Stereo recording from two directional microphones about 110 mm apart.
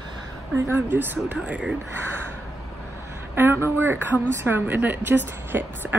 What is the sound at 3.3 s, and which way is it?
A woman's voice, 20° right (ahead or behind).